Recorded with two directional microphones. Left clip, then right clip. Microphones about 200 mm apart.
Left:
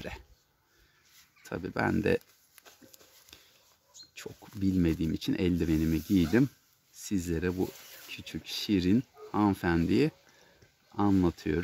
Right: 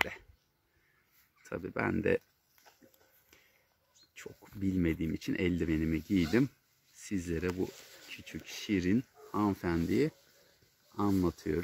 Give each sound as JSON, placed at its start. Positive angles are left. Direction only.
{"t": 1.4, "sound": "speech", "side_deg": 25}
{"t": 4.1, "sound": "speech", "side_deg": 20}